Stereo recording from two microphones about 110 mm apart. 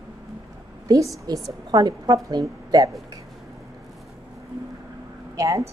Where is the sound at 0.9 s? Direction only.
30° right (ahead or behind).